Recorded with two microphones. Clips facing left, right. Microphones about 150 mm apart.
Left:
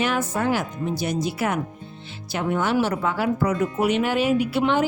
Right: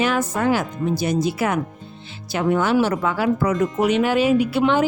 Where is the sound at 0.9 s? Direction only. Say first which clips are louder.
Right 4 dB; 90° right.